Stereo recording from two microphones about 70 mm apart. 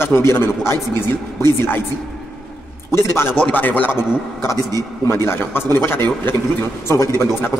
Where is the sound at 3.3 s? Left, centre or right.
Left.